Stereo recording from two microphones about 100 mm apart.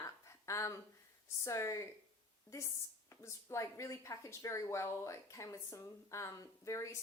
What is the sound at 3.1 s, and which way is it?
Speech, 30° left (ahead or behind).